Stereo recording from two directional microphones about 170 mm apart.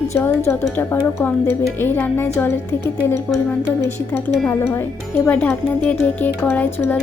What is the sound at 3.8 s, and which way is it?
A woman's voice, 15° left (ahead or behind).